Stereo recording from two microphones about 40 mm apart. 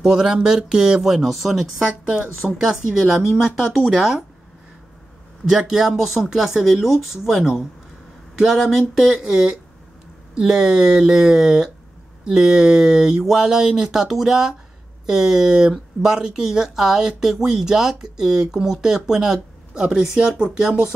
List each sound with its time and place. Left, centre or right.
0.0 s speech: centre
1.1 s speech: centre
2.6 s speech: centre
5.5 s speech: centre